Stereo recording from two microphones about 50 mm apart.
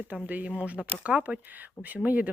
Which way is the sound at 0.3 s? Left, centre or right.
Right.